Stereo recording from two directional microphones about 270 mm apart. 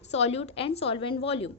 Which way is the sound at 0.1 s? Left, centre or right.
Left.